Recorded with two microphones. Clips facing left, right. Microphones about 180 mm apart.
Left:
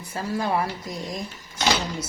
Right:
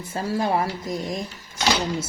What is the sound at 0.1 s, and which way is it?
Speech, 25° right (ahead or behind).